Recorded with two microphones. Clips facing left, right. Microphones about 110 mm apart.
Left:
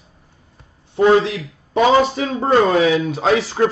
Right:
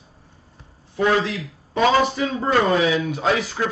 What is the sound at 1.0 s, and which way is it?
Speech, 25° left (ahead or behind).